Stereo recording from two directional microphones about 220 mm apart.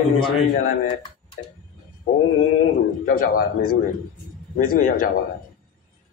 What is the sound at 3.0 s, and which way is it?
Speech, 40° left (ahead or behind).